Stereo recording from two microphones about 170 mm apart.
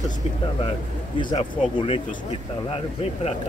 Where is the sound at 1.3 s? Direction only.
30° left (ahead or behind).